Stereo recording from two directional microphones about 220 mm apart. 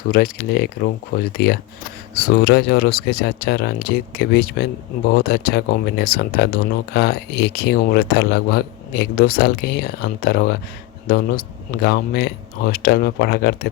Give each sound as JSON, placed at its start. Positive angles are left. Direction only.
{"t": 0.1, "sound": "speech", "side_deg": 45}